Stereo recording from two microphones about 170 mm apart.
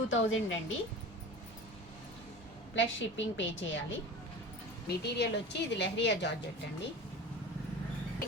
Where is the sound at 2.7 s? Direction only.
90° left.